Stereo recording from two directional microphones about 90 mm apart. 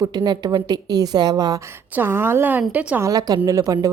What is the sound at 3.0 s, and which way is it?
Speech, 40° right (ahead or behind).